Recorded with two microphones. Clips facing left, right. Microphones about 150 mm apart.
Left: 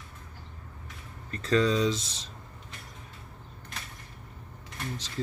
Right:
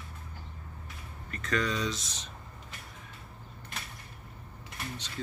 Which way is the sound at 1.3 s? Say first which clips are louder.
Left 7 dB; 30° left (ahead or behind).